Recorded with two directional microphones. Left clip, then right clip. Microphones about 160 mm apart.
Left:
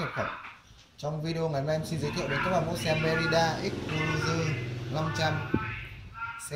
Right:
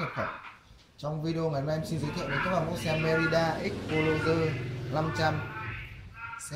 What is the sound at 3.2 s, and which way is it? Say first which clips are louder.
Speech: left 4 dB; 15° right (ahead or behind).